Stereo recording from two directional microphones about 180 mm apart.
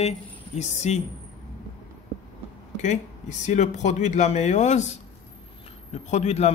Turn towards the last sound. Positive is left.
turn(degrees=35)  # may be behind; listen again after turning